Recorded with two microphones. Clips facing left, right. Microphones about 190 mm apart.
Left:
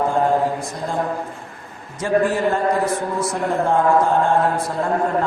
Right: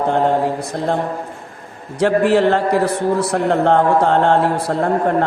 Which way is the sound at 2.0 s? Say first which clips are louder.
Right 5 dB; 70° right (ahead or behind).